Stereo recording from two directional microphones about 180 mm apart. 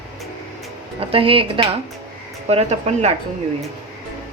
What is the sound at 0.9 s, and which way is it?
Speech, 30° right (ahead or behind).